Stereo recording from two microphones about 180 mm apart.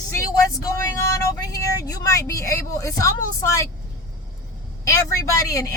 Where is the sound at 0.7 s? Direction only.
15° left (ahead or behind).